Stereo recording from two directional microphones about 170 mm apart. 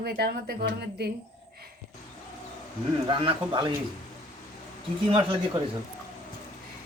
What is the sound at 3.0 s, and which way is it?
Speech, 30° right (ahead or behind).